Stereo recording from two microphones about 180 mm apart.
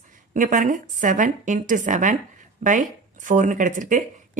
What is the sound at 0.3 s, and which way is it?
Speech, 45° right (ahead or behind).